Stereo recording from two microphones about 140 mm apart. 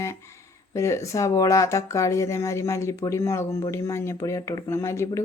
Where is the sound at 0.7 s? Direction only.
20° left (ahead or behind).